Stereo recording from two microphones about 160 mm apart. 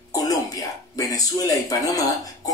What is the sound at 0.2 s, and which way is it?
Speech, 20° left (ahead or behind).